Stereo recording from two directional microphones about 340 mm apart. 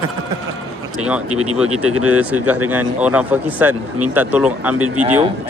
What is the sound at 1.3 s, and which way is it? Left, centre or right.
Speech, right.